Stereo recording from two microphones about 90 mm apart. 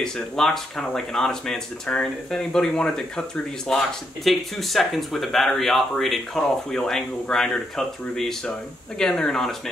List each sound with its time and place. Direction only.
0.0 s speech: 5° left (ahead or behind)